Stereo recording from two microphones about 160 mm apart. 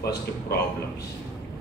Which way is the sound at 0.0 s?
90° left.